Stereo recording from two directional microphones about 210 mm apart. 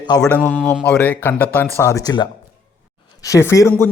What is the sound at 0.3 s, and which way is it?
A man's voice, 5° left (ahead or behind).